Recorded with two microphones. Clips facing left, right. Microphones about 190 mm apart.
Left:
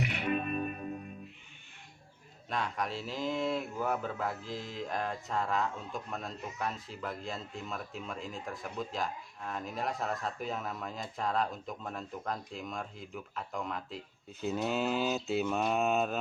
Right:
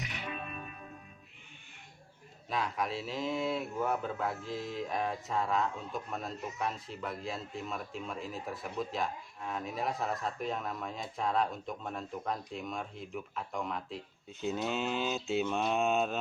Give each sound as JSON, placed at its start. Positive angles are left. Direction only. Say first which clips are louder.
{"t": 0.0, "sound": "music", "louder": "left 9 dB", "side_deg": 60}
{"t": 2.5, "sound": "speech", "louder": "right 1 dB", "side_deg": 0}